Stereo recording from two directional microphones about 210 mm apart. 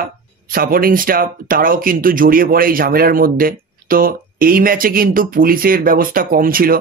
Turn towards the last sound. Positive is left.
turn(degrees=-45)  # may be behind; listen again after turning